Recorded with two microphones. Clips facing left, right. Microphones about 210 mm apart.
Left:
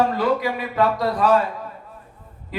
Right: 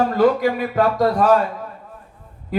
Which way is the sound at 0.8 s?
50° right (ahead or behind).